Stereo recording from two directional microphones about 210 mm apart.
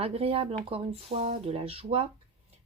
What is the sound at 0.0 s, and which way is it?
Speech, 30° right (ahead or behind).